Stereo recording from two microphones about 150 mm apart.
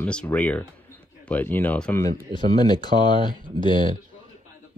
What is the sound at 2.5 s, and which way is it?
Speech, 30° left (ahead or behind).